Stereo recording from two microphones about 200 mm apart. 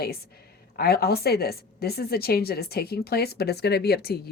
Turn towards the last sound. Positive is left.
turn(degrees=50)  # may be behind; listen again after turning